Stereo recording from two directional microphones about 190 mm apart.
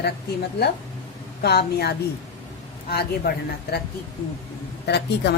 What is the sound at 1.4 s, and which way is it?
A woman's voice, 60° left (ahead or behind).